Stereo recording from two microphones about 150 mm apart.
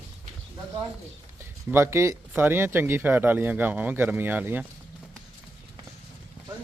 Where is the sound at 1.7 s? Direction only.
15° right (ahead or behind).